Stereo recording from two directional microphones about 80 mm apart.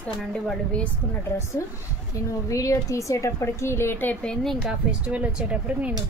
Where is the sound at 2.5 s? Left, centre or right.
Left; by 4.4 s centre.